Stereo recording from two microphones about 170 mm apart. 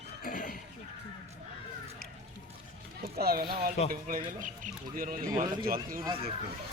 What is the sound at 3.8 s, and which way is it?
Speech, 40° left (ahead or behind).